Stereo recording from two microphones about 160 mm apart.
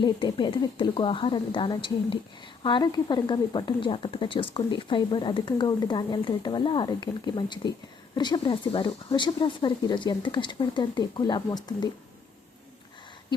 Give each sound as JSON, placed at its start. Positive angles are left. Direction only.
{"t": 0.0, "sound": "a woman's voice", "side_deg": 30}